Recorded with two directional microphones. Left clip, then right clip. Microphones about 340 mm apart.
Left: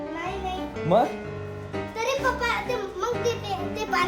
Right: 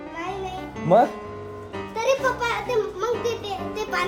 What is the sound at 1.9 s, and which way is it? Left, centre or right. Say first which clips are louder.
A child's voice: right 4 dB; centre.